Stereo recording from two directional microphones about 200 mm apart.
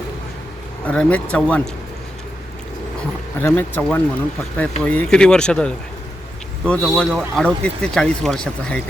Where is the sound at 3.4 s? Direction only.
10° left (ahead or behind).